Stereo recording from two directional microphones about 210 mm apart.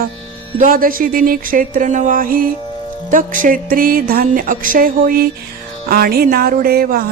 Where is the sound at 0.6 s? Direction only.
40° right (ahead or behind).